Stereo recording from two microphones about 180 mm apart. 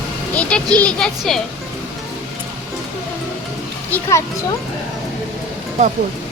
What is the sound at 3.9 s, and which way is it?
Speech, 15° left (ahead or behind).